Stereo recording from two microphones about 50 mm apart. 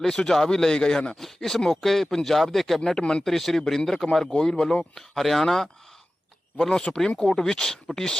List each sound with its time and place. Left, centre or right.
0.0 s speech: centre
3.0 s speech: centre
3.2 s speech: centre
4.3 s speech: centre